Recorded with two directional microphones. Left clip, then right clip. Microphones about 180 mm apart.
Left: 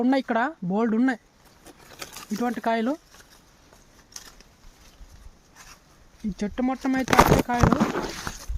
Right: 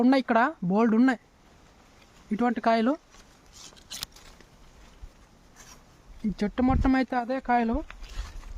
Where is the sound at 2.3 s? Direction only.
10° right (ahead or behind).